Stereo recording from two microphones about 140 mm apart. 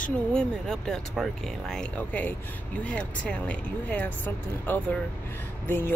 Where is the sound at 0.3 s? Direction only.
5° left (ahead or behind).